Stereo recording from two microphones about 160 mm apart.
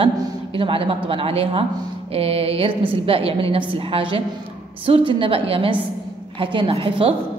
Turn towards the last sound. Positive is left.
turn(degrees=-35)  # may be behind; listen again after turning